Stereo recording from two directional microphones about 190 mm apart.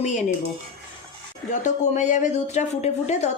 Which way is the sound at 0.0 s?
40° left (ahead or behind).